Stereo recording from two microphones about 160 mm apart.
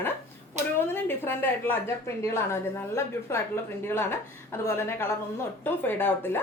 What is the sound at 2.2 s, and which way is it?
A woman's voice, 15° left (ahead or behind).